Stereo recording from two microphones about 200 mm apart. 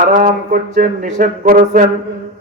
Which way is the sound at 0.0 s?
40° right (ahead or behind).